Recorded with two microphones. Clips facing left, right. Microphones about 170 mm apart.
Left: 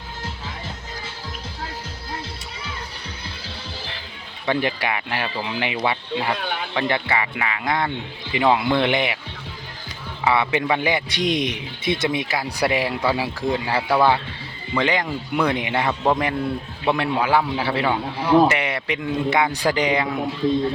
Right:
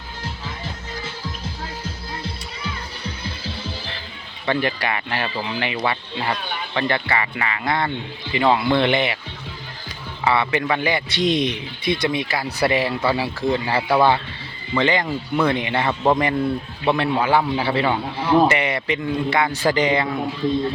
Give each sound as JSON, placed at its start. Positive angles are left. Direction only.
{"t": 4.4, "sound": "a man's voice", "side_deg": 15}
{"t": 10.2, "sound": "a man's voice", "side_deg": 10}
{"t": 13.7, "sound": "a man's voice", "side_deg": -10}
{"t": 14.8, "sound": "a man's voice", "side_deg": 5}
{"t": 19.1, "sound": "speech", "side_deg": 20}
{"t": 19.7, "sound": "a man's voice", "side_deg": 10}